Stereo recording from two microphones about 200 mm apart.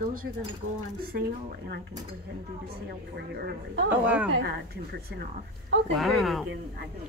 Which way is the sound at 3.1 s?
55° right (ahead or behind).